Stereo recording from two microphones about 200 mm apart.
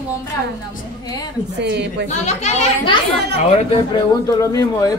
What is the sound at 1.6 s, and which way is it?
Speech, 55° right (ahead or behind).